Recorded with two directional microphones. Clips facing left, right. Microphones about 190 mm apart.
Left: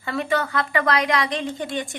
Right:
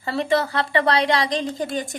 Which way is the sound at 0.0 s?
35° right (ahead or behind).